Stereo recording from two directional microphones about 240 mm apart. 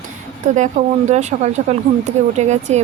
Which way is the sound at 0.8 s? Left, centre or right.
Right.